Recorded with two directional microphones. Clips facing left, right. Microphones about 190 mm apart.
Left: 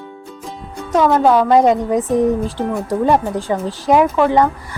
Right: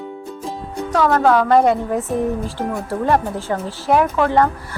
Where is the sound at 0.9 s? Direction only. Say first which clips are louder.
Left 2 dB; 20° left (ahead or behind).